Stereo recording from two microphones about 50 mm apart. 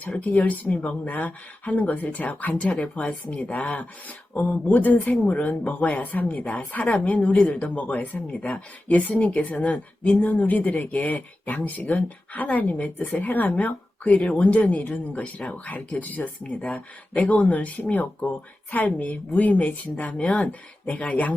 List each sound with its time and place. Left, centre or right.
0.2 s speech: left